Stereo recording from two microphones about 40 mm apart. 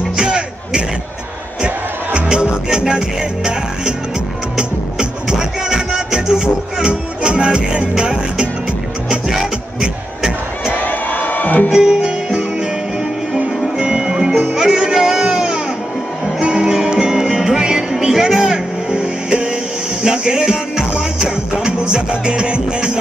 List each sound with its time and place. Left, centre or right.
0.2 s music: right
2.1 s music: right
4.6 s music: centre
10.7 s music: left
11.7 s music: centre
13.7 s music: centre